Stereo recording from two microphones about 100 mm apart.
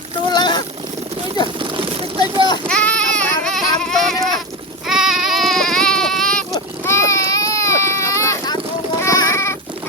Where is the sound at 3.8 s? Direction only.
5° left (ahead or behind).